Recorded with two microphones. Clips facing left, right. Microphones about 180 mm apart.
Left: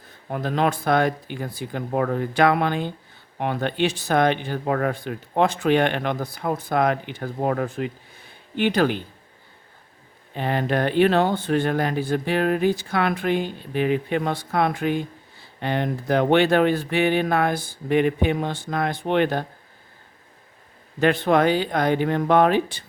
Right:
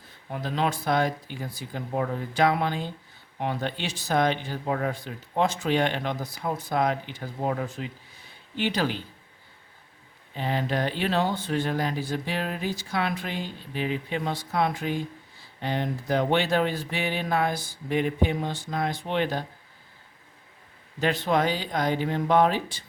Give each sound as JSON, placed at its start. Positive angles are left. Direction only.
{"t": 0.3, "sound": "speech", "side_deg": 55}
{"t": 10.3, "sound": "speech", "side_deg": 60}
{"t": 21.0, "sound": "speech", "side_deg": 55}